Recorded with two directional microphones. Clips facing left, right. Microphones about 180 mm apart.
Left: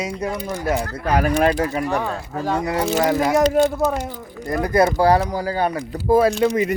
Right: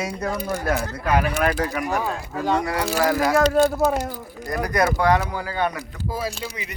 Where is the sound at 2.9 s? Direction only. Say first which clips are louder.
Left 1 dB; 20° left (ahead or behind).